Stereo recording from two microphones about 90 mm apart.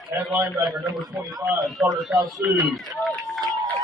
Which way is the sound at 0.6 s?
35° right (ahead or behind).